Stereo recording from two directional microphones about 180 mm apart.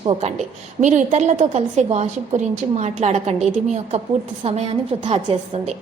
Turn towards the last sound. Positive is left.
turn(degrees=-35)  # may be behind; listen again after turning